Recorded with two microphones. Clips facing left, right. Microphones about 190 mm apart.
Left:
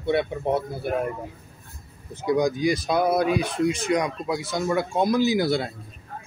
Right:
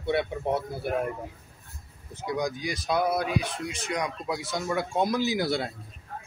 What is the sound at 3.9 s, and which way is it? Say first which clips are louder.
Speech: left 6 dB; 85° left.